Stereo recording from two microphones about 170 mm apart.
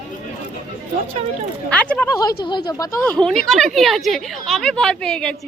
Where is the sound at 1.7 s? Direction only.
5° left (ahead or behind).